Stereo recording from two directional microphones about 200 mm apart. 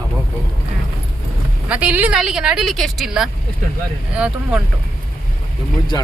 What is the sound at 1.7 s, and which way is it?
A man's voice, 5° right (ahead or behind).